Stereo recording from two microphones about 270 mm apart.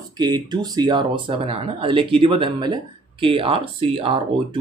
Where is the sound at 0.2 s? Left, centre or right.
Centre.